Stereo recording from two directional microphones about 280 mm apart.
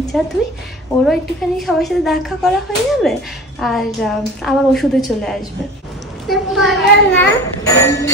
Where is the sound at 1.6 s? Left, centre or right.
Centre.